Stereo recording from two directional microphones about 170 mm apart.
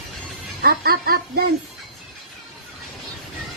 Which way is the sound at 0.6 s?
65° right (ahead or behind).